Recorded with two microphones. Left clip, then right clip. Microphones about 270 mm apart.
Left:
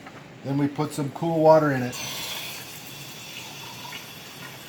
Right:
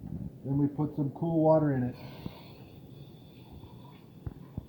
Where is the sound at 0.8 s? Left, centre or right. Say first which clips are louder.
Left 6 dB; left.